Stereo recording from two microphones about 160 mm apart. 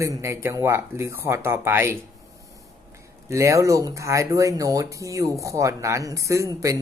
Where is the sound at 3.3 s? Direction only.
20° right (ahead or behind).